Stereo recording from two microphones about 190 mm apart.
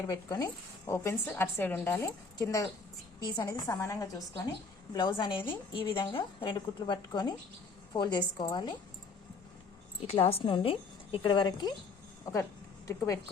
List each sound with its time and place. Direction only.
0.1 s a woman's voice: 20° left (ahead or behind)
10.1 s a woman's voice: 30° left (ahead or behind); by 13.1 s 15° left (ahead or behind)